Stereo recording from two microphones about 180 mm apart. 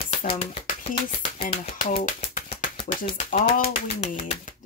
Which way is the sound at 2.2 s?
35° left (ahead or behind).